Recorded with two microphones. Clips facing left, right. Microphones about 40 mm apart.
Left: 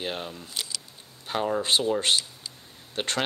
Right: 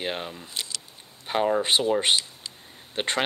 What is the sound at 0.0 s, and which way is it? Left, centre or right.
Speech, centre.